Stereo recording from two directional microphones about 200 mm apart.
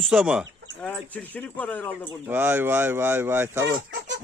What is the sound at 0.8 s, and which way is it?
Speech, 5° left (ahead or behind).